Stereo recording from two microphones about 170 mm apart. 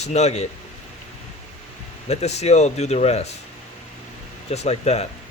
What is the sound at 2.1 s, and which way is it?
Speech, 40° left (ahead or behind).